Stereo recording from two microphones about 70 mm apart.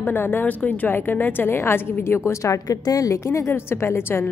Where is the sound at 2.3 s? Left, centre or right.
Left.